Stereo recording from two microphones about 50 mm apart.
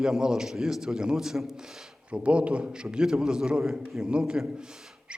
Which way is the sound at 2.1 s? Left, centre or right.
Right.